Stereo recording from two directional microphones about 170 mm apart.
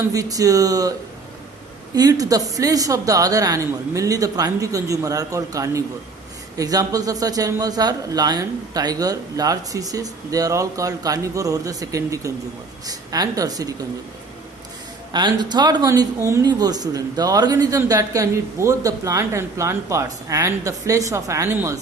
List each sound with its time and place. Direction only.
0.1 s speech: 20° right (ahead or behind)
2.0 s speech: 20° right (ahead or behind)
15.1 s speech: 25° right (ahead or behind)